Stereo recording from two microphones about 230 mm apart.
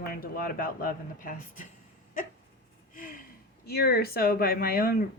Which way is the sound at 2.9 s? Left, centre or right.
Left.